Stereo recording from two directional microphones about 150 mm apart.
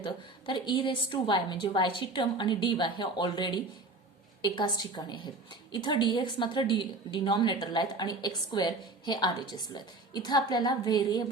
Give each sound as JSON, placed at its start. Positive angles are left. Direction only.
{"t": 0.0, "sound": "a woman's voice", "side_deg": 30}